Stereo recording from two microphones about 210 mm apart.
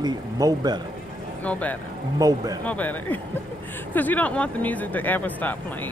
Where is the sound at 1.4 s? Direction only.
5° left (ahead or behind).